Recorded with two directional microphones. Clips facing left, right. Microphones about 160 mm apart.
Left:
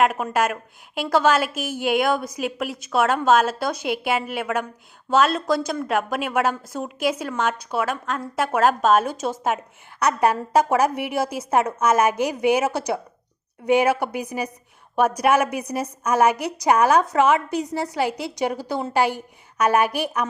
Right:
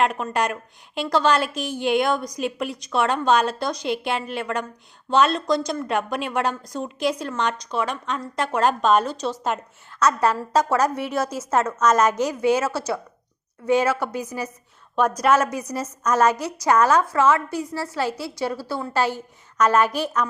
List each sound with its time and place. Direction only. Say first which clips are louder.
0.0 s a woman's voice: left 2 dB; 5° left (ahead or behind)